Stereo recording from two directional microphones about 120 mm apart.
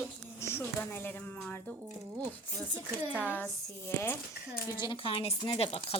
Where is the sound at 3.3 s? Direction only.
15° left (ahead or behind).